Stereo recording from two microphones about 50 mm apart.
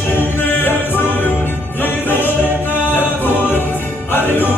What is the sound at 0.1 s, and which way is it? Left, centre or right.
Music, left.